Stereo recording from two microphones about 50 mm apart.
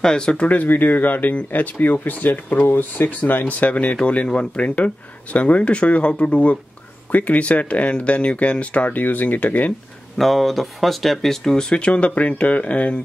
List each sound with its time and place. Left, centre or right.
0.0 s speech: centre
0.5 s speech: left
10.1 s speech: centre; by 13.0 s left